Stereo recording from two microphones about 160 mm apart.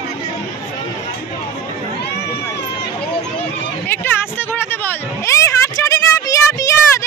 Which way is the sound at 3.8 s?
15° left (ahead or behind).